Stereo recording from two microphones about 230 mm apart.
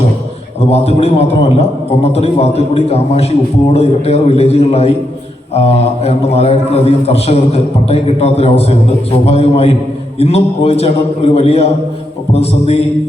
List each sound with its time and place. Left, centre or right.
0.6 s a man's voice: left